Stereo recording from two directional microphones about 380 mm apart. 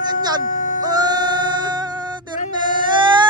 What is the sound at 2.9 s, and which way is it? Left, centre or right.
Baby cry, centre.